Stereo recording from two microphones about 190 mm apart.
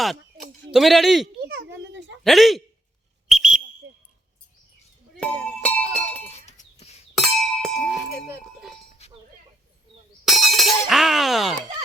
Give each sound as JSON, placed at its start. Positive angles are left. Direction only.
{"t": 0.7, "sound": "a man's voice", "side_deg": 0}
{"t": 1.5, "sound": "a sound", "side_deg": -65}
{"t": 2.2, "sound": "a man's voice", "side_deg": 0}
{"t": 3.2, "sound": "whistle", "side_deg": -5}
{"t": 5.2, "sound": "a sound", "side_deg": 5}
{"t": 6.4, "sound": "chink", "side_deg": 35}
{"t": 7.2, "sound": "chink", "side_deg": 0}
{"t": 9.0, "sound": "chink", "side_deg": 35}
{"t": 10.2, "sound": "speech", "side_deg": 0}